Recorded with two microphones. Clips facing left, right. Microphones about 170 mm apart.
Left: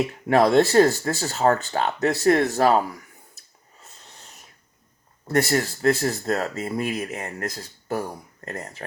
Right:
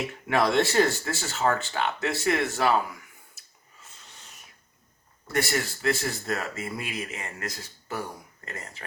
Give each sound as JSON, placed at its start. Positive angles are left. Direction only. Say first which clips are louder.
{"t": 0.3, "sound": "speech", "louder": "left 6 dB", "side_deg": 40}
{"t": 5.3, "sound": "speech", "louder": "left 6 dB", "side_deg": 40}